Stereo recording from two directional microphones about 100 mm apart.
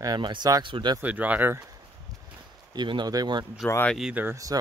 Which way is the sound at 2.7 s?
50° right (ahead or behind).